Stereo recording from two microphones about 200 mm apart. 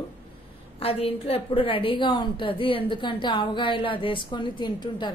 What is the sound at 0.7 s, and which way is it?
A woman's voice, 30° left (ahead or behind).